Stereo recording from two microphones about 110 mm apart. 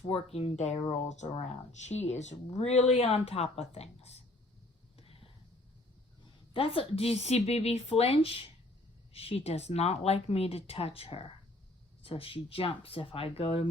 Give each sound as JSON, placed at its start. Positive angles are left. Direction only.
{"t": 0.0, "sound": "speech", "side_deg": 65}
{"t": 4.9, "sound": "a sound", "side_deg": 60}
{"t": 6.5, "sound": "speech", "side_deg": 55}